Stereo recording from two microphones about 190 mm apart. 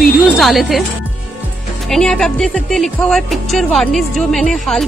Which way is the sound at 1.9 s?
5° left (ahead or behind).